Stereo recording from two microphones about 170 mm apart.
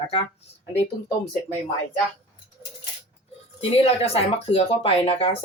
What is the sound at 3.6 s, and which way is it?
Speech, 35° left (ahead or behind).